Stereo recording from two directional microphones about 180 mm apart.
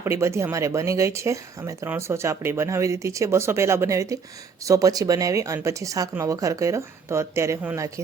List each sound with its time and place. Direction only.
0.0 s speech: 15° right (ahead or behind)